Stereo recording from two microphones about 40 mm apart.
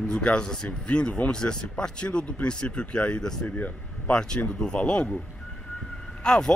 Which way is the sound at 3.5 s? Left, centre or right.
Left.